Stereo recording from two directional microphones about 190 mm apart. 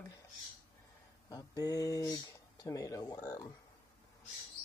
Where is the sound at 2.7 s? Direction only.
15° left (ahead or behind).